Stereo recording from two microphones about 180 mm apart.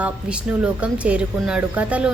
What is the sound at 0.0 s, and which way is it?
A woman's voice, 5° right (ahead or behind).